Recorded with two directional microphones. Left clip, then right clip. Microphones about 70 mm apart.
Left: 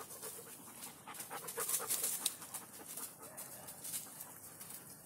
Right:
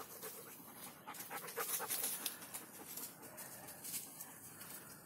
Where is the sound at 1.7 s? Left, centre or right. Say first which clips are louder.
Left 2 dB; right.